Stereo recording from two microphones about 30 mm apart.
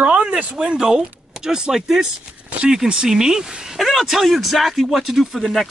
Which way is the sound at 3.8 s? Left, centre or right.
Centre.